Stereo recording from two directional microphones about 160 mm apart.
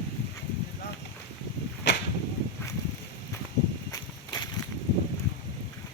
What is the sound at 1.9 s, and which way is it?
Whip, 90° left.